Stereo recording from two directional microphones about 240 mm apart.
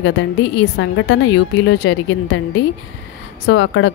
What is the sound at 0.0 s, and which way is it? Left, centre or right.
A woman's voice, left.